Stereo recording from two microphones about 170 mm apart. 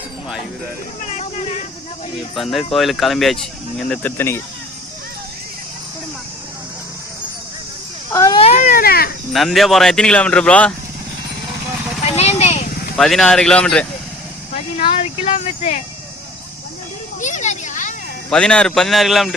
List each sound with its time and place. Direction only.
1.0 s a sound: 40° left (ahead or behind)
2.3 s speech: centre (ahead or behind)
8.1 s baby cry: 20° left (ahead or behind)
8.4 s baby cry: 40° left (ahead or behind); by 9.0 s 60° left (ahead or behind)
9.3 s speech: centre (ahead or behind)
12.1 s vehicle: 35° left (ahead or behind)
13.0 s speech: centre (ahead or behind)
14.8 s speech: 35° left (ahead or behind)
17.2 s a sound: 45° left (ahead or behind)
18.3 s speech: 5° left (ahead or behind)